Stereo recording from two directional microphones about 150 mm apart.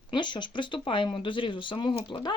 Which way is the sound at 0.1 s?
30° left (ahead or behind).